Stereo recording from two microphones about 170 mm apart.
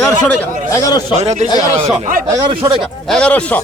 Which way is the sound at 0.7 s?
20° left (ahead or behind).